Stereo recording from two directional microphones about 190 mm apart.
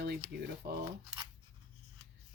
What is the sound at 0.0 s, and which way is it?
Speech, 55° right (ahead or behind).